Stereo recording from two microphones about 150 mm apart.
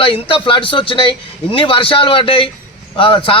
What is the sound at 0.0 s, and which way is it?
A man's voice, 35° left (ahead or behind).